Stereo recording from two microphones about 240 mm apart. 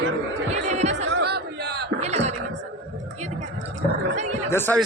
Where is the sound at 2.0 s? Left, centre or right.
Right.